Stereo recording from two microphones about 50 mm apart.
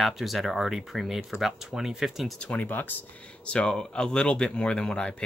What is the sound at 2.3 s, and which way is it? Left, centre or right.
Speech, centre.